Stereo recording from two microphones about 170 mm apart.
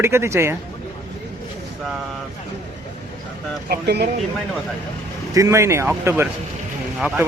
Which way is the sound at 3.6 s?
70° right (ahead or behind).